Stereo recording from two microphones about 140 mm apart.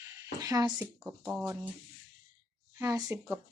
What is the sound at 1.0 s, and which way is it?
Speech, 10° right (ahead or behind).